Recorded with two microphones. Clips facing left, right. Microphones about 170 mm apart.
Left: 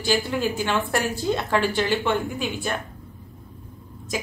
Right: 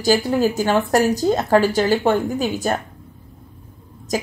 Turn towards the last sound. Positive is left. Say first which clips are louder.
# right 6 dB
turn(degrees=-40)  # may be behind; listen again after turning